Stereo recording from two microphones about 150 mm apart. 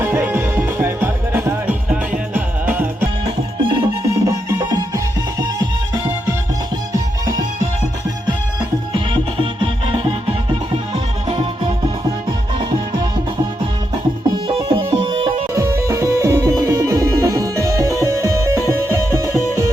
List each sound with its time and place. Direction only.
0.0 s music: 15° right (ahead or behind)
3.2 s music: 35° right (ahead or behind)
8.9 s music: 35° right (ahead or behind)
14.4 s music: 35° right (ahead or behind)
15.5 s music: 20° right (ahead or behind)